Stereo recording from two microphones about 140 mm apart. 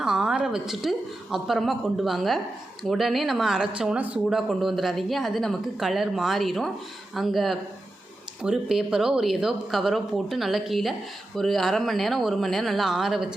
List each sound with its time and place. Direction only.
0.0 s speech: 5° right (ahead or behind)